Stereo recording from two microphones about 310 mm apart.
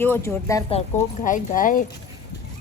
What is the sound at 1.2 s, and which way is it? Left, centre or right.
Speech, left.